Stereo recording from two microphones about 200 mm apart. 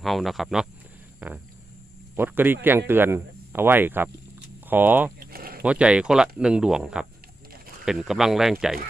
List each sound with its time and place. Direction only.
0.0 s speech: centre (ahead or behind)
5.3 s a sound: 45° right (ahead or behind)
5.6 s speech: 5° right (ahead or behind)